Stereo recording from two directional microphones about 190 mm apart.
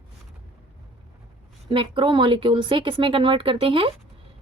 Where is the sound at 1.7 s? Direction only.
25° right (ahead or behind).